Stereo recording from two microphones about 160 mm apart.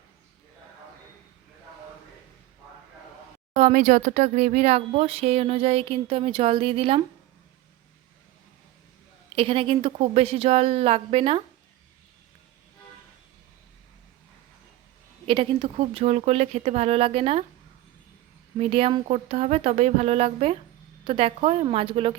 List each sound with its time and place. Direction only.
3.5 s speech: 45° right (ahead or behind)
9.3 s speech: 35° right (ahead or behind)
15.3 s speech: 35° right (ahead or behind)
18.6 s speech: 35° right (ahead or behind)